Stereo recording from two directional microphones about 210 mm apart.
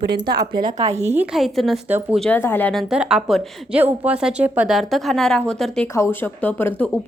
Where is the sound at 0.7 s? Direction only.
30° right (ahead or behind).